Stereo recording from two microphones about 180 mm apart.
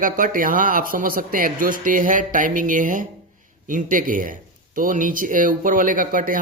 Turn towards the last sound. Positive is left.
turn(degrees=-50)  # may be behind; listen again after turning